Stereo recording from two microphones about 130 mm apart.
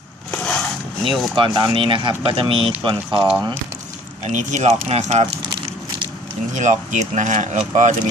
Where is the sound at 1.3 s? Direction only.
35° right (ahead or behind).